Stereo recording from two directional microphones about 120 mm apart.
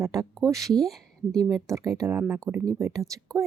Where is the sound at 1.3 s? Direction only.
30° right (ahead or behind).